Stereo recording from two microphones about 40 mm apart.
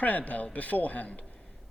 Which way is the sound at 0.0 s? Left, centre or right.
Left.